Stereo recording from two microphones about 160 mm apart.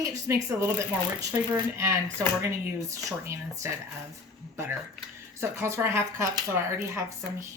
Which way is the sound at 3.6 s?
15° right (ahead or behind).